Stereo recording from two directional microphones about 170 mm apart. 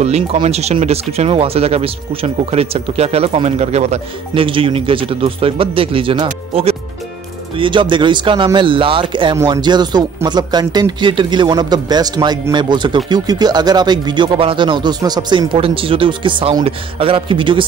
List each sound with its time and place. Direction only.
0.0 s speech: 40° right (ahead or behind)